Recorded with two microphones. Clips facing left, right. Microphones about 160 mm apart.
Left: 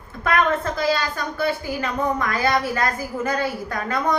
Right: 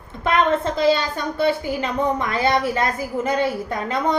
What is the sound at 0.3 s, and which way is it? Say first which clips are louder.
A woman's voice: right 2 dB; 25° right (ahead or behind).